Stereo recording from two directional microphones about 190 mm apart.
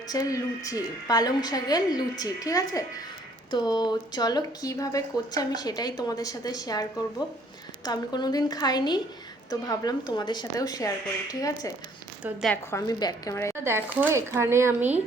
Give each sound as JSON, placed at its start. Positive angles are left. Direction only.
{"t": 0.1, "sound": "speech", "side_deg": 20}
{"t": 7.9, "sound": "speech", "side_deg": 20}
{"t": 12.2, "sound": "a woman's voice", "side_deg": 0}
{"t": 12.7, "sound": "a woman's voice", "side_deg": 20}
{"t": 13.7, "sound": "speech", "side_deg": -10}